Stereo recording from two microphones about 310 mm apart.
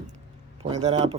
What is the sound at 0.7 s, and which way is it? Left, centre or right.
Speech, centre.